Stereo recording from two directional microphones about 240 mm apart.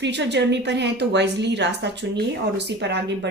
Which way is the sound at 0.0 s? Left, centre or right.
Right.